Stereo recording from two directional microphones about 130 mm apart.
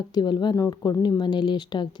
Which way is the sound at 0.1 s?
35° left (ahead or behind).